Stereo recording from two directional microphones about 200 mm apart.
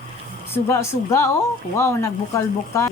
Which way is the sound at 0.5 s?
15° left (ahead or behind).